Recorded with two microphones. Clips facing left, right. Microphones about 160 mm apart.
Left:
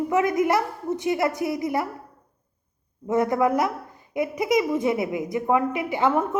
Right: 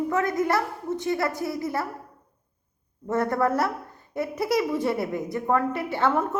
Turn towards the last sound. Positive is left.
turn(degrees=15)  # may be behind; listen again after turning